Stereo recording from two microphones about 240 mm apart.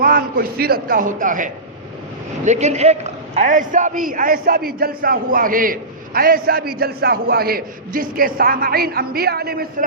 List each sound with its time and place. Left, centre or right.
0.0 s a man's voice: right